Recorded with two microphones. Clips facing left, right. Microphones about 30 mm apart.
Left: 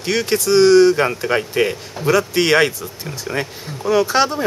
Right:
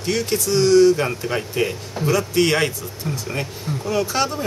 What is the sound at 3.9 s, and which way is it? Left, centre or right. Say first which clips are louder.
Speech: left 6 dB; left.